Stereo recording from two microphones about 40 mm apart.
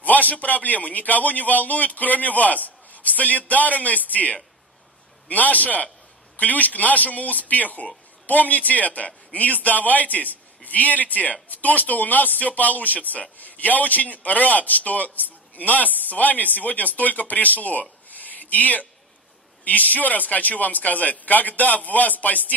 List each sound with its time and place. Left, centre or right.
0.0 s a man's voice: left